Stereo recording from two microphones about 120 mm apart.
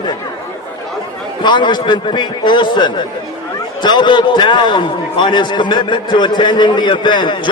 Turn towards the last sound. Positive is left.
turn(degrees=40)  # may be behind; listen again after turning